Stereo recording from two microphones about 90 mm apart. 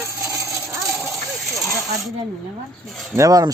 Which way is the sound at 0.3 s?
30° right (ahead or behind).